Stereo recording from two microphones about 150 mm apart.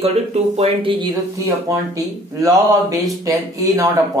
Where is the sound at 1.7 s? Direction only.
25° right (ahead or behind).